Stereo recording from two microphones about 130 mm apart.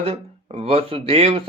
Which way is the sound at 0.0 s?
50° right (ahead or behind).